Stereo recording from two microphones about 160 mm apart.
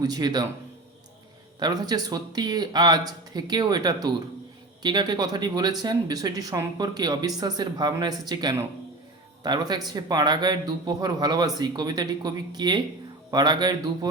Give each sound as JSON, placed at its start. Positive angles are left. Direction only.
{"t": 0.0, "sound": "speech", "side_deg": -25}
{"t": 1.5, "sound": "speech", "side_deg": -25}